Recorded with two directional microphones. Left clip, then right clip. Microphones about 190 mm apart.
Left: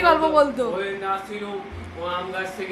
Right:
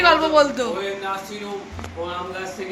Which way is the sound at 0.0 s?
15° left (ahead or behind).